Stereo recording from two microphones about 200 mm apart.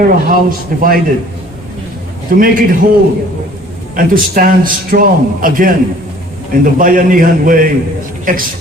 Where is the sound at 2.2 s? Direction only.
45° right (ahead or behind).